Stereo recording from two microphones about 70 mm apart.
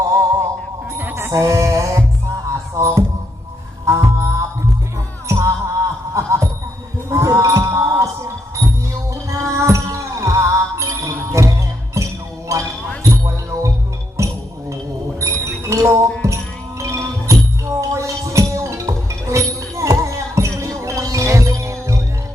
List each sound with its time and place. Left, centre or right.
0.0 s music: right
0.9 s a sound: right
1.3 s music: right
7.1 s a sound: right
9.0 s music: right
12.5 s heart sounds: right
13.0 s music: right
14.2 s chink: right
15.2 s music: right